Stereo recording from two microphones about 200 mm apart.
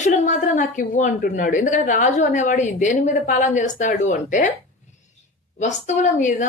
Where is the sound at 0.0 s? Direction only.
40° left (ahead or behind).